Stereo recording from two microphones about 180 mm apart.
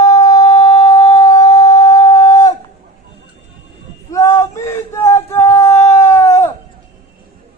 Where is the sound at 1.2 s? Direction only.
20° left (ahead or behind).